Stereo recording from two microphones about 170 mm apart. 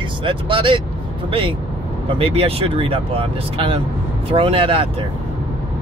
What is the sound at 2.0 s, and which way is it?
Speech, 35° right (ahead or behind).